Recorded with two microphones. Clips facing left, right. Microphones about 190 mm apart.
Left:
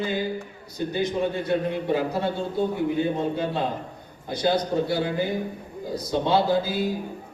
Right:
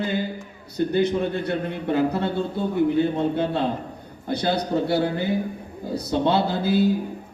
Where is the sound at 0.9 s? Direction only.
60° right (ahead or behind).